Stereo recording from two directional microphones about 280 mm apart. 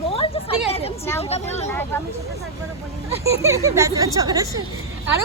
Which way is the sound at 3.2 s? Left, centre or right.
Centre.